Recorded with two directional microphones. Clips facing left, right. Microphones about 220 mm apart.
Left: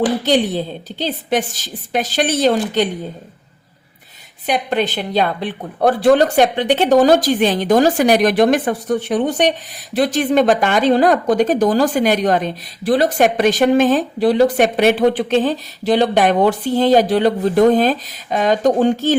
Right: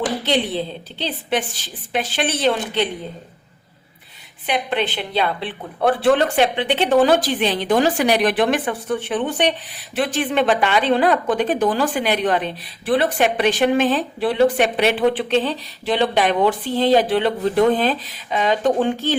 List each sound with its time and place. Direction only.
0.3 s a woman's voice: 45° left (ahead or behind)
4.4 s a woman's voice: 45° left (ahead or behind)